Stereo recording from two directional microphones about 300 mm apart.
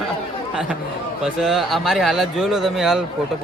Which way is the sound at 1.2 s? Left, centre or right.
Centre.